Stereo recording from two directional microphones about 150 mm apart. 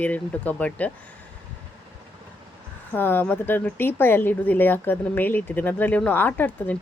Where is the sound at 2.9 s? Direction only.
15° left (ahead or behind).